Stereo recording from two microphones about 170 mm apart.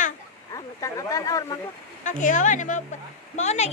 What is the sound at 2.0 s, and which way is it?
A woman's voice, 45° left (ahead or behind).